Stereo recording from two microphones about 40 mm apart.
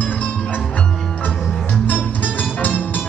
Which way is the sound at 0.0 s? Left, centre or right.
Left.